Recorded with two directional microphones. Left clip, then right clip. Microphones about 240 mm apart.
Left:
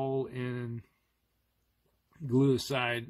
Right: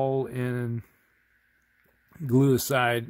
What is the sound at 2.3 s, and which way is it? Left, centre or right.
Speech, right.